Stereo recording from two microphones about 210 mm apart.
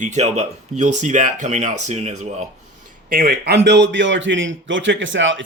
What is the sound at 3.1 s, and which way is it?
A man's voice, 45° right (ahead or behind).